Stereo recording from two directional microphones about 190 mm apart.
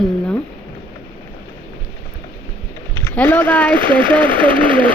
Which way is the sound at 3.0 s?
10° left (ahead or behind).